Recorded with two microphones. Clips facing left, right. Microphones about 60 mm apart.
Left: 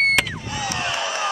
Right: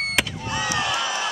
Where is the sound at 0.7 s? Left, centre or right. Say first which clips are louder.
Even; left.